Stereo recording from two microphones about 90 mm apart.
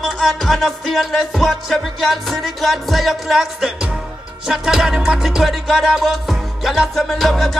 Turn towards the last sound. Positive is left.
turn(degrees=0)  # may be behind; listen again after turning